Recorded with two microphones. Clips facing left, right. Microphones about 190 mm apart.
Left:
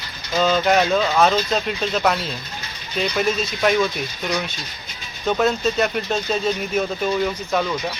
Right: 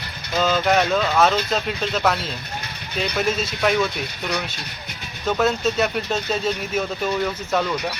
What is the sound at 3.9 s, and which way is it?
Speech, 65° right (ahead or behind).